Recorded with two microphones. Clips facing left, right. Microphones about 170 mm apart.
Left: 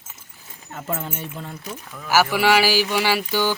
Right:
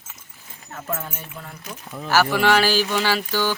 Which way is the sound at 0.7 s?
20° left (ahead or behind).